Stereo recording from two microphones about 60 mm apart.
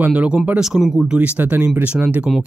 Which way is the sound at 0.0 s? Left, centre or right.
Right.